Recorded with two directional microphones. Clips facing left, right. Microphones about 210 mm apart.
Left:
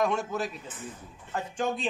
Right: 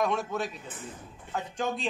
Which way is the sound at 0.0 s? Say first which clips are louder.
Left 1 dB; centre (ahead or behind).